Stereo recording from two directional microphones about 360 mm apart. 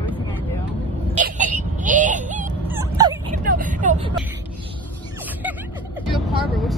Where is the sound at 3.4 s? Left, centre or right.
Right.